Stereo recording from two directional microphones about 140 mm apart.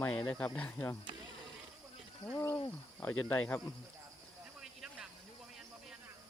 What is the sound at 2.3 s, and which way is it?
Speech, 20° left (ahead or behind).